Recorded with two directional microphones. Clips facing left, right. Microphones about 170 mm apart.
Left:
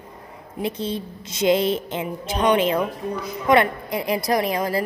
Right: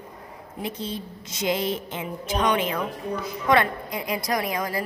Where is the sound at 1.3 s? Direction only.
25° left (ahead or behind).